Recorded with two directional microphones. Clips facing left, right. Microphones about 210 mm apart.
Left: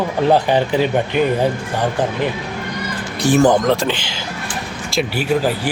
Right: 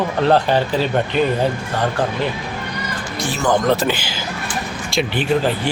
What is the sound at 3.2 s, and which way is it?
Speech, 40° left (ahead or behind).